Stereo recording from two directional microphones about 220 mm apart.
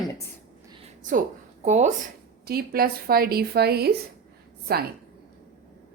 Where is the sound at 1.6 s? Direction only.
30° right (ahead or behind).